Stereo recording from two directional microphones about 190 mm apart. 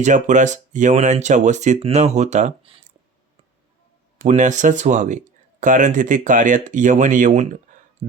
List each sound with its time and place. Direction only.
0.0 s speech: 40° right (ahead or behind)
4.2 s speech: 40° right (ahead or behind)